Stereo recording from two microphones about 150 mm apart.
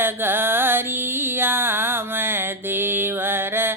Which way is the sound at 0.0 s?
15° right (ahead or behind).